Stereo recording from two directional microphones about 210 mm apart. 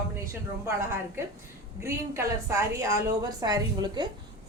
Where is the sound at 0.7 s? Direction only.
10° right (ahead or behind).